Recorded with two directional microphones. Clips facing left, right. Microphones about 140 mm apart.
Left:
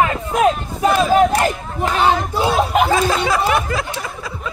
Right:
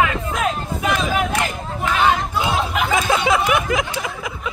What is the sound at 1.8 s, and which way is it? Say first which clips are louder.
Chatter: left 1 dB; 40° left (ahead or behind).